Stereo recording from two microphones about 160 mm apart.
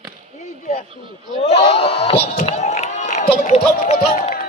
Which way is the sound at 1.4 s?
40° left (ahead or behind).